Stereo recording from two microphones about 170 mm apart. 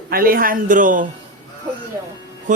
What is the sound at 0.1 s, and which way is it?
Speech, 60° right (ahead or behind).